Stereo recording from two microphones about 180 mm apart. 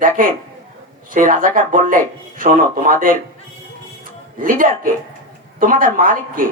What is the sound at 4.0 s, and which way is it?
Music, 50° right (ahead or behind).